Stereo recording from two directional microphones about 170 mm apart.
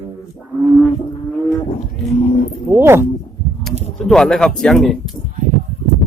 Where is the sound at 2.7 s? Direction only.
15° right (ahead or behind).